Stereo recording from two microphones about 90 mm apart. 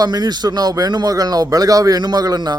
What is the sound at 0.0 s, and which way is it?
A man's voice, 50° right (ahead or behind).